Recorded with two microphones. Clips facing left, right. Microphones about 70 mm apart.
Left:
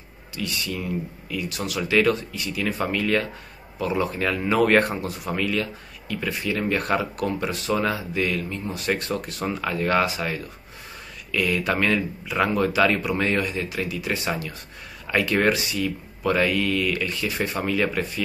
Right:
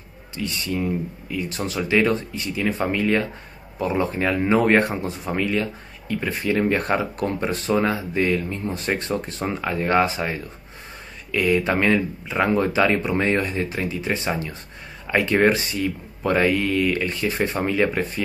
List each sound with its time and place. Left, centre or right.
0.4 s speech: right